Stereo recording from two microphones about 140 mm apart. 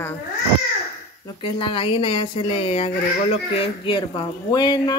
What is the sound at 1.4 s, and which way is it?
Speech, 40° left (ahead or behind).